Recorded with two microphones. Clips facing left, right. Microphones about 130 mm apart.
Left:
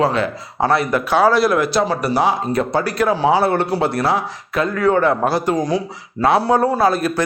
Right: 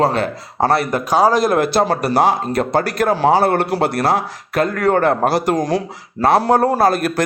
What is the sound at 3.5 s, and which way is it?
A man's voice, 70° right (ahead or behind).